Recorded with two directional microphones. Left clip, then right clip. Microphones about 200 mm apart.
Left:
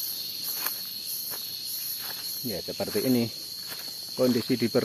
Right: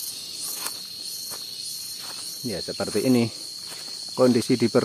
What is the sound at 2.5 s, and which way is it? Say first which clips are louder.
Cricket: right 4 dB; 40° right (ahead or behind).